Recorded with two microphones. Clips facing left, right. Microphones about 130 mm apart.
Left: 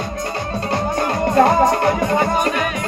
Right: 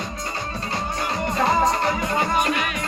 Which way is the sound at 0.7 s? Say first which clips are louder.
Left 7 dB; 60° left (ahead or behind).